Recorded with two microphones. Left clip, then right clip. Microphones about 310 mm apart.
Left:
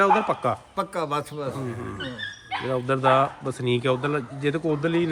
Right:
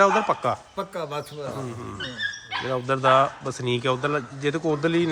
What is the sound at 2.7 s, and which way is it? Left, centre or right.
A man's voice, centre.